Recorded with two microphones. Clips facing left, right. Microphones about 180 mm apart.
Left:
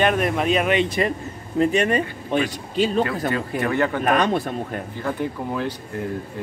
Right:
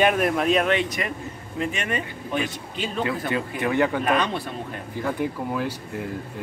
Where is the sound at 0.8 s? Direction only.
30° left (ahead or behind).